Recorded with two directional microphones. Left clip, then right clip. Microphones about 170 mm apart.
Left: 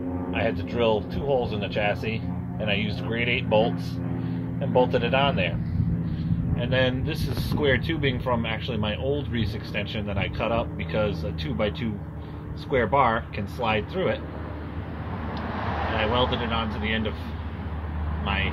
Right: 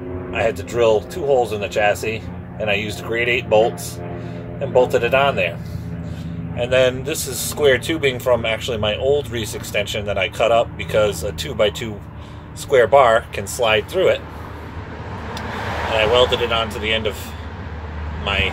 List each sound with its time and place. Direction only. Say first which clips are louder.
0.3 s speech: right 8 dB; 25° right (ahead or behind)
4.7 s speech: right 7 dB; 30° right (ahead or behind)
6.6 s speech: right 9 dB; 30° right (ahead or behind)
16.0 s speech: right 10 dB; 35° right (ahead or behind)
18.2 s speech: right 8 dB; 35° right (ahead or behind)